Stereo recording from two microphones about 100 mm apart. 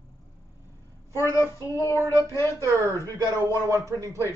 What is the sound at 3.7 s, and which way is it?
Speech, 35° right (ahead or behind).